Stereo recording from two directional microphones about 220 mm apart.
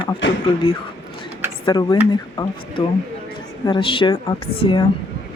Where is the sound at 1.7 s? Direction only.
20° left (ahead or behind).